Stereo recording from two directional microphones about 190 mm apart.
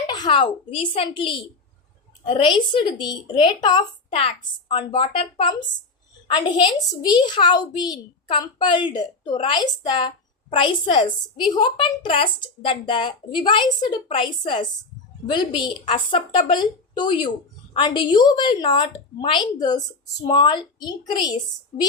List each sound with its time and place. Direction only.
0.1 s speech: 25° left (ahead or behind)